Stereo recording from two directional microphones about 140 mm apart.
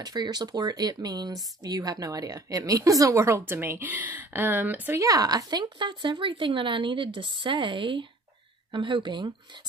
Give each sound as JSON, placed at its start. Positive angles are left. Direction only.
{"t": 0.0, "sound": "speech", "side_deg": -30}
{"t": 5.0, "sound": "speech", "side_deg": -25}